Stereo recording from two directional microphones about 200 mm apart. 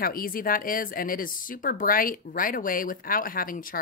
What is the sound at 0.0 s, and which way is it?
A woman's voice, 45° left (ahead or behind).